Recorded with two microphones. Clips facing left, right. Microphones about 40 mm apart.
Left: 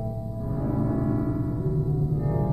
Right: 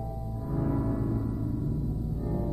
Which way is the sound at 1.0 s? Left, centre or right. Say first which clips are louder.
Left 5 dB; left.